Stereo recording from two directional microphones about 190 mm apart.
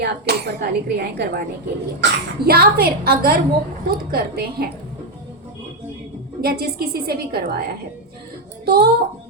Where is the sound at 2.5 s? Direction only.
55° right (ahead or behind).